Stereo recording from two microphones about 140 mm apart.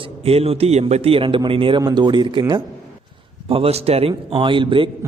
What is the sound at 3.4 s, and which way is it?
Speech, 45° right (ahead or behind).